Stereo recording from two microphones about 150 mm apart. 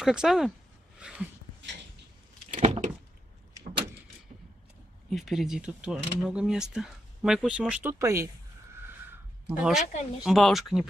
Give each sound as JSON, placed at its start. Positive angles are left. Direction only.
{"t": 0.0, "sound": "speech", "side_deg": -5}
{"t": 0.9, "sound": "a sound", "side_deg": -5}
{"t": 2.5, "sound": "a sound", "side_deg": -50}
{"t": 5.1, "sound": "speech", "side_deg": 0}
{"t": 8.0, "sound": "speech", "side_deg": -20}
{"t": 9.5, "sound": "speech", "side_deg": -5}